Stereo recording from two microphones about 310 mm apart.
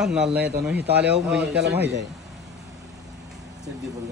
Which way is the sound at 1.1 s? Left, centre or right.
Centre.